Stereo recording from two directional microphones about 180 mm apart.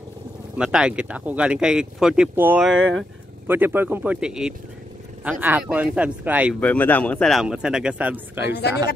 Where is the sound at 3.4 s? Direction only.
10° right (ahead or behind).